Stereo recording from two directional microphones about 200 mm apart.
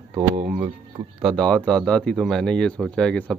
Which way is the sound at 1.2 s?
5° left (ahead or behind).